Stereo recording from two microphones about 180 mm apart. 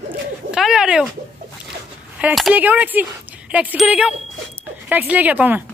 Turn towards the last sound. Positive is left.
turn(degrees=-10)  # may be behind; listen again after turning